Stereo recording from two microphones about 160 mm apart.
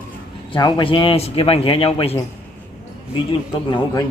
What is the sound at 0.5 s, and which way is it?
A man's voice, 30° left (ahead or behind).